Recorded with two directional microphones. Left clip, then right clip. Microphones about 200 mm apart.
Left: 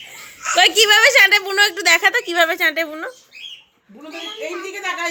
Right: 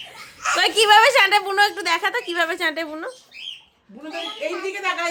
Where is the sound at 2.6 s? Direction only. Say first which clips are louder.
Left 5 dB; centre (ahead or behind).